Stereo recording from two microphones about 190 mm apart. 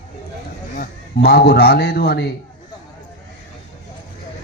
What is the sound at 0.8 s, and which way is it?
Speech, 55° left (ahead or behind).